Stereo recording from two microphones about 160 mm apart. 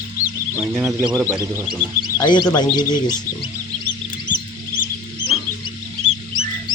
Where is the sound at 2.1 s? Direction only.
25° left (ahead or behind).